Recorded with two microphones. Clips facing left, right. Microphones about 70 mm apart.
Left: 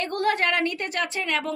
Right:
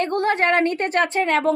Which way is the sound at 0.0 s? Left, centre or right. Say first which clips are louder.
Right 4 dB; right.